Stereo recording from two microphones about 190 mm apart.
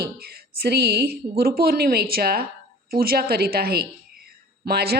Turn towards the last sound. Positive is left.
turn(degrees=-55)  # may be behind; listen again after turning